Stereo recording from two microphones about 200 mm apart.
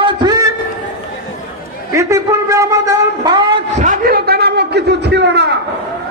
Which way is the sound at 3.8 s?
45° right (ahead or behind).